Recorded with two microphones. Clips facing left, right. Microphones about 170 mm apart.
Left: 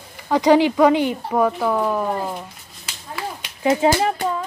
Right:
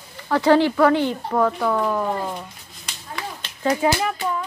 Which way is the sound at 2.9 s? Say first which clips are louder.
Left 2 dB; 5° left (ahead or behind).